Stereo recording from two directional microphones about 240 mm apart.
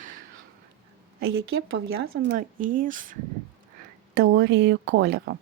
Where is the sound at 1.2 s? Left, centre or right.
Right.